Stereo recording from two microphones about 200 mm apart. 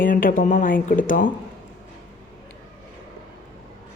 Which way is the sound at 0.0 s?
45° left (ahead or behind).